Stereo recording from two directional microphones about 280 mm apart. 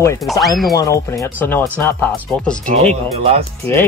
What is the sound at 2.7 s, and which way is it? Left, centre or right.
Speech, right.